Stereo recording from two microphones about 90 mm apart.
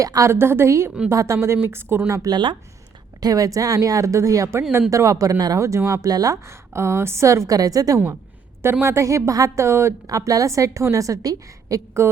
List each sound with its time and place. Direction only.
0.0 s a woman's voice: 35° right (ahead or behind)
2.3 s speech: 60° right (ahead or behind)
3.2 s a woman's voice: 45° right (ahead or behind)